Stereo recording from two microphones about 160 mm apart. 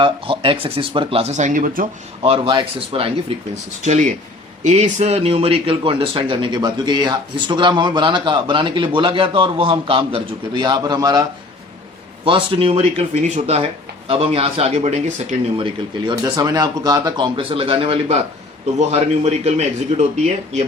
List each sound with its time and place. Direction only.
0.0 s speech: 30° right (ahead or behind); by 1.9 s 60° right (ahead or behind)
2.2 s speech: 35° right (ahead or behind)
12.2 s speech: 35° right (ahead or behind)